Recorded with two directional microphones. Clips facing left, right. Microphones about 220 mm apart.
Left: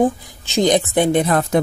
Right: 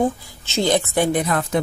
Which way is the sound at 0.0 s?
15° left (ahead or behind).